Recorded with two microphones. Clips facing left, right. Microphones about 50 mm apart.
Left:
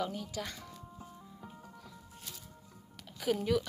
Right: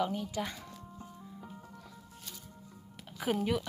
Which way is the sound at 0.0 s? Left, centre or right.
Centre.